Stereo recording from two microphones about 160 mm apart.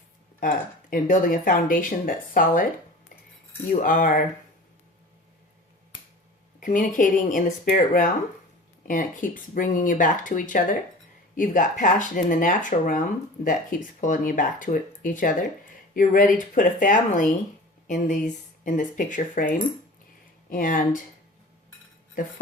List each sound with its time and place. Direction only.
0.3 s speech: 60° left (ahead or behind)
3.8 s speech: 55° left (ahead or behind)
6.6 s speech: 55° left (ahead or behind)